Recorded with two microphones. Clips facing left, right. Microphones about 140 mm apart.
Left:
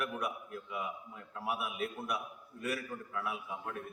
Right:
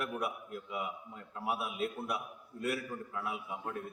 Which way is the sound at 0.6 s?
25° right (ahead or behind).